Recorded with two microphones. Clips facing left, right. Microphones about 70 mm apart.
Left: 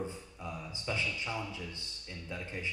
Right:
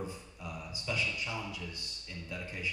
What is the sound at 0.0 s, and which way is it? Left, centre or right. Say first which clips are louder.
A man's voice: left 2 dB; left.